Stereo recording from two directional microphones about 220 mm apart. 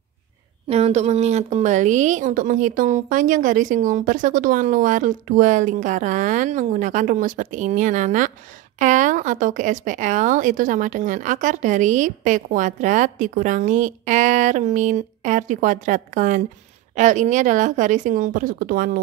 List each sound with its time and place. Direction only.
0.7 s speech: 30° right (ahead or behind)